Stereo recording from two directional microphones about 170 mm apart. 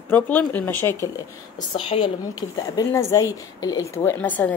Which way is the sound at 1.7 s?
35° left (ahead or behind).